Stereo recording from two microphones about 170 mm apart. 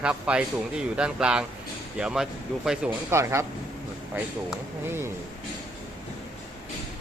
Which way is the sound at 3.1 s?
15° right (ahead or behind).